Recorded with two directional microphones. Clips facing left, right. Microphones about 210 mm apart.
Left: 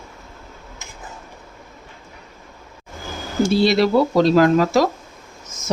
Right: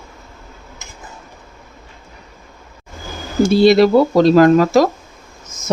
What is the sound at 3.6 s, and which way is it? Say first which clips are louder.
Speech: right 7 dB; 50° right (ahead or behind).